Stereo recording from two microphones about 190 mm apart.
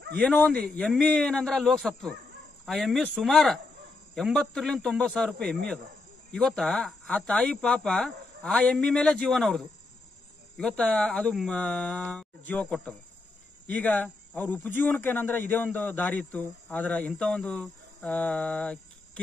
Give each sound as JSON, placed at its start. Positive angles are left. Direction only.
{"t": 0.2, "sound": "speech", "side_deg": 5}
{"t": 10.8, "sound": "speech", "side_deg": 5}